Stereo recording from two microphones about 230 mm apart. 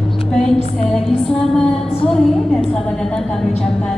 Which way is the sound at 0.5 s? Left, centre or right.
Left.